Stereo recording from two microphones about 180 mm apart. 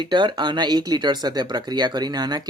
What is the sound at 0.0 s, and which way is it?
Speech, 25° right (ahead or behind).